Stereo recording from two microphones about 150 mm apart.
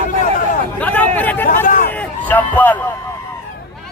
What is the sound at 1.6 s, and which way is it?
Hubbub, 60° left (ahead or behind).